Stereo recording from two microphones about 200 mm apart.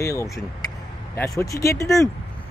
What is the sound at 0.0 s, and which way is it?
Speech, 15° left (ahead or behind).